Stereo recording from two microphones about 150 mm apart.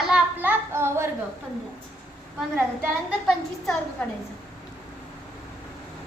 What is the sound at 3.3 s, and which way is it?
Speech, 5° left (ahead or behind).